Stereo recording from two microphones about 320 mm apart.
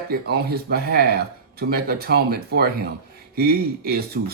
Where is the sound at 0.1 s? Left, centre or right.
Right.